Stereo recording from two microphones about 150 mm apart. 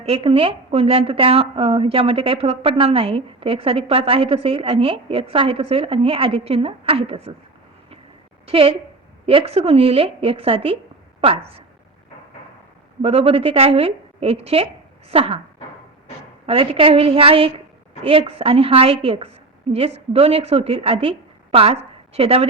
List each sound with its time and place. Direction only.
0.0 s a woman's voice: 40° right (ahead or behind)
8.4 s a woman's voice: 40° right (ahead or behind)
13.0 s a woman's voice: 45° right (ahead or behind)
16.5 s a woman's voice: 40° right (ahead or behind)